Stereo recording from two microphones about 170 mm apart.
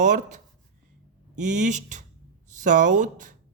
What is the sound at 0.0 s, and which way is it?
A man's voice, 45° right (ahead or behind).